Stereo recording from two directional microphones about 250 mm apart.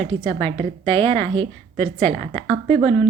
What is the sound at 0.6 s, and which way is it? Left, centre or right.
Speech, right.